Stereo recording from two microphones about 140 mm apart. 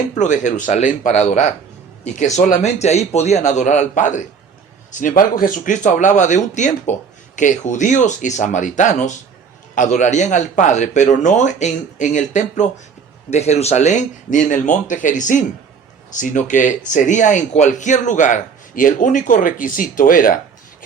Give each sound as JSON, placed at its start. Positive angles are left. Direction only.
{"t": 0.2, "sound": "speech", "side_deg": 60}